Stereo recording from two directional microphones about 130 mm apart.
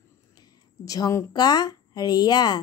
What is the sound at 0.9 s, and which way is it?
Speech, 25° left (ahead or behind).